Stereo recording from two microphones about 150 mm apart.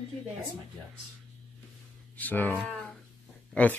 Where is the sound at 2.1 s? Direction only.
10° left (ahead or behind).